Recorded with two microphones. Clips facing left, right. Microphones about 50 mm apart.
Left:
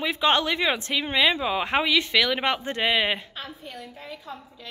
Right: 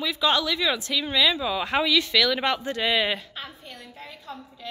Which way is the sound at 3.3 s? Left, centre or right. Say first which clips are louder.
Left 2 dB; centre.